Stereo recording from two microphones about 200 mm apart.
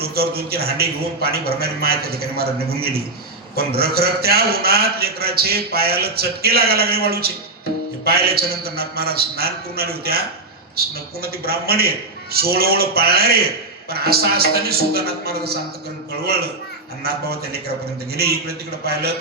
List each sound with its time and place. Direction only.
0.0 s a man's voice: 50° right (ahead or behind)